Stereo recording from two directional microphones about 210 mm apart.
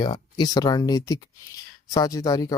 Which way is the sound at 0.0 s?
20° left (ahead or behind).